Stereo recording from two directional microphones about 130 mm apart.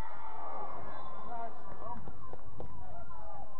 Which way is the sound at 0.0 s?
30° right (ahead or behind).